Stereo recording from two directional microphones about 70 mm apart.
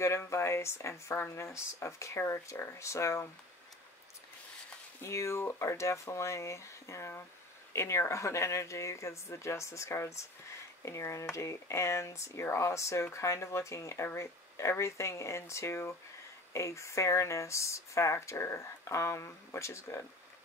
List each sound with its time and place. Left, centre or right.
0.2 s speech: left
5.0 s speech: left